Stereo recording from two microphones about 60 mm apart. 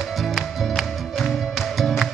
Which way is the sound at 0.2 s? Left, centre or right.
Centre.